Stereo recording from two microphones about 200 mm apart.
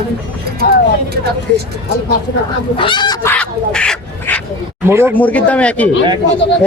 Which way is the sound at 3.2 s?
5° left (ahead or behind).